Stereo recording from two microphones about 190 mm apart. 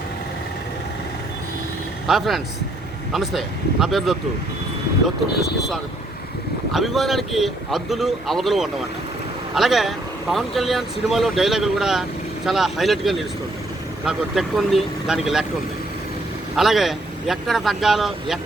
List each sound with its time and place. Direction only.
2.0 s speech: centre (ahead or behind)
6.7 s speech: centre (ahead or behind)
16.6 s speech: centre (ahead or behind)